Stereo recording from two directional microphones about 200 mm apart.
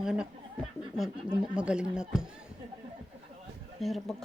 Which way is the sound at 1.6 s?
5° right (ahead or behind).